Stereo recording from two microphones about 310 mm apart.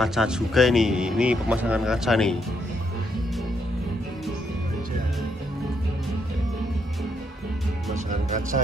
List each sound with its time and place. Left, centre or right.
0.0 s speech: centre
7.9 s music: right